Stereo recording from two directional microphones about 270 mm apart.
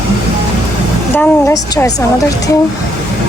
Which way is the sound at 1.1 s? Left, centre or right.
Centre.